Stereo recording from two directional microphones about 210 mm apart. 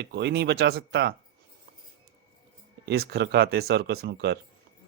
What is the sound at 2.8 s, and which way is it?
Speech, 50° right (ahead or behind).